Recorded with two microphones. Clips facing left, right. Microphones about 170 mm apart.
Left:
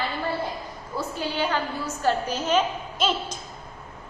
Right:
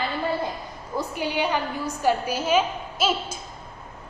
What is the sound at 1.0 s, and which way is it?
A woman's voice, 15° right (ahead or behind).